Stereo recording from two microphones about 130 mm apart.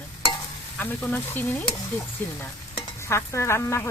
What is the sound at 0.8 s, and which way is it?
Speech, 15° left (ahead or behind).